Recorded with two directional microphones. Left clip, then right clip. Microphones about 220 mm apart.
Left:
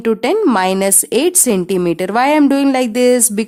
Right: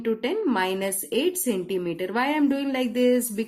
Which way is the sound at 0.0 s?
50° left (ahead or behind).